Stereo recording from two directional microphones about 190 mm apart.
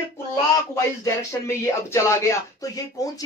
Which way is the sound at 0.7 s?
15° left (ahead or behind).